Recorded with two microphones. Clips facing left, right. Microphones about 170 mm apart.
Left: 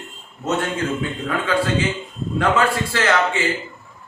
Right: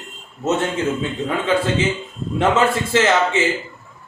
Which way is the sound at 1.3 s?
20° right (ahead or behind).